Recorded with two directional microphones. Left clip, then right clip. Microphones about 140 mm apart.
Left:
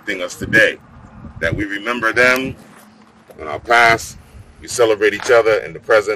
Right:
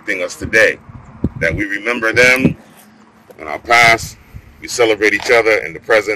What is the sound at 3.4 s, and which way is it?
Speech, 5° right (ahead or behind).